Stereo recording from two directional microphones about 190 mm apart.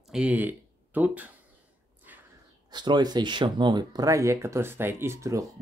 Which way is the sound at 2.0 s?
10° right (ahead or behind).